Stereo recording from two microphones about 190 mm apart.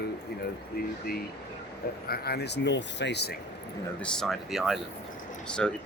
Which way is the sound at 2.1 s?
55° left (ahead or behind).